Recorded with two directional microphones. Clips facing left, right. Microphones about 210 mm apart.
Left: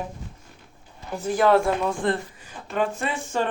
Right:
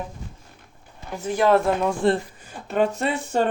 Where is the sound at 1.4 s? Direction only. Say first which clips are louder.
Right 1 dB; 15° right (ahead or behind).